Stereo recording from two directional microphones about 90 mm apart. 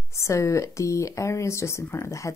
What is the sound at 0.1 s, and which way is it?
Speech, 35° left (ahead or behind).